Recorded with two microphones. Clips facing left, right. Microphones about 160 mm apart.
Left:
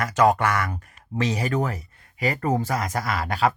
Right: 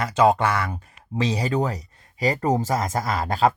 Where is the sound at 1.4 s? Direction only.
20° right (ahead or behind).